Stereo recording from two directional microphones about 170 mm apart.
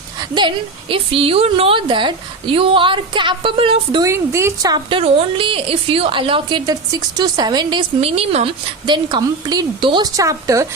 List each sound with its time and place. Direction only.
0.2 s a woman's voice: 25° right (ahead or behind)
4.0 s a woman's voice: 15° right (ahead or behind); by 8.5 s 40° right (ahead or behind)
8.9 s a woman's voice: 25° right (ahead or behind)